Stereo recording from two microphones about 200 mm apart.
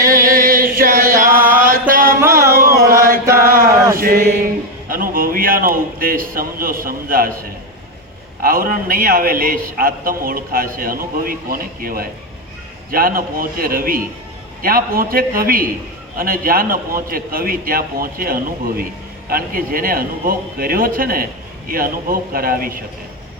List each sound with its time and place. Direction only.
0.0 s chant: 45° right (ahead or behind)
1.9 s music: 45° right (ahead or behind)
2.2 s a sound: 15° right (ahead or behind)
2.9 s chant: 45° right (ahead or behind)
3.4 s a sound: 45° right (ahead or behind)
3.9 s speech: 45° right (ahead or behind)
8.4 s a man's voice: 45° right (ahead or behind)